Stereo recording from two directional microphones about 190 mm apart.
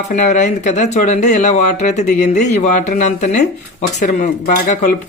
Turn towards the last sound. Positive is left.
turn(degrees=40)  # may be behind; listen again after turning